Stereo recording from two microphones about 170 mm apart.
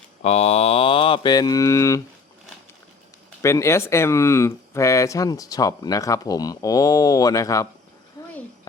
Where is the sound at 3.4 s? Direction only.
15° left (ahead or behind).